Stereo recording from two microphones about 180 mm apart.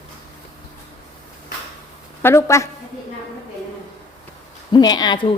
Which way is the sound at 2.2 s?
15° left (ahead or behind).